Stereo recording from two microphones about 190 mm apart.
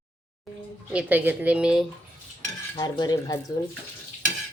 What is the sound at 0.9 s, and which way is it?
Speech, 10° right (ahead or behind).